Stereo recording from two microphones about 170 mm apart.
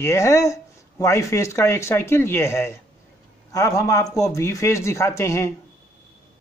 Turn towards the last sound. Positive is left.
turn(degrees=15)  # may be behind; listen again after turning